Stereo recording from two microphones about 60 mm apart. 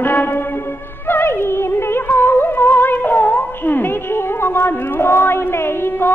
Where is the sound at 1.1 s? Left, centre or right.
Left.